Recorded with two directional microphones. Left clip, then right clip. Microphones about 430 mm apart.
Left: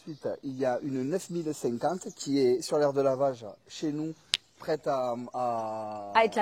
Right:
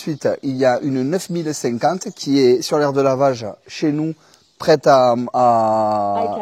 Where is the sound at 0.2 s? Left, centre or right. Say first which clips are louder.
Right 14 dB; right.